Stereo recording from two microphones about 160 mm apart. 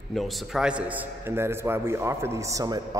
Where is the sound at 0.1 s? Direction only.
Centre (ahead or behind).